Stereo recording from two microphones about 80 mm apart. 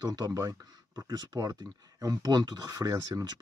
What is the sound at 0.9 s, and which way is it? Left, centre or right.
Speech, right.